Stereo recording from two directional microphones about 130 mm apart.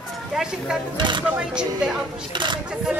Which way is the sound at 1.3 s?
5° right (ahead or behind).